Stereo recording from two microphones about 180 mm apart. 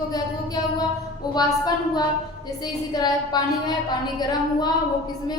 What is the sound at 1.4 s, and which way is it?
A woman's voice, 20° left (ahead or behind).